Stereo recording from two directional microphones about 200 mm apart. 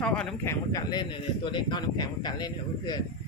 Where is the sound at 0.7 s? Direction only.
20° left (ahead or behind).